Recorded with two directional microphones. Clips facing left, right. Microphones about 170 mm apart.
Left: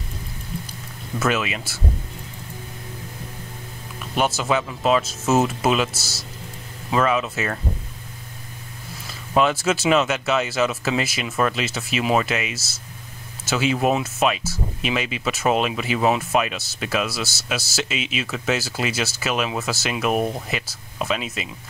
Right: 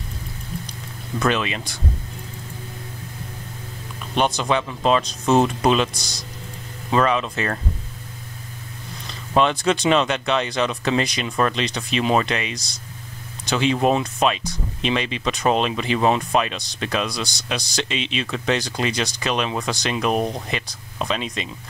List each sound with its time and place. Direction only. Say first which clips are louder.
1.2 s speech: right 1 dB; 5° left (ahead or behind)
4.2 s speech: right 1 dB; 5° left (ahead or behind)
9.0 s speech: even; 5° left (ahead or behind)